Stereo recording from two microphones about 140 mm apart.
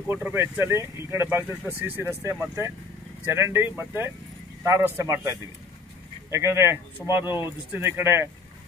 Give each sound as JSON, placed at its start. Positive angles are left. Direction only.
{"t": 0.1, "sound": "speech", "side_deg": -15}
{"t": 6.3, "sound": "speech", "side_deg": -20}